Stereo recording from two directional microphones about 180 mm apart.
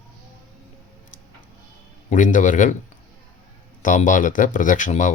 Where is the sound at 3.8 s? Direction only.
45° left (ahead or behind).